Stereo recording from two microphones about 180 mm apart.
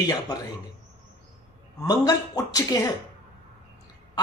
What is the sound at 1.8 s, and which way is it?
Speech, 20° left (ahead or behind).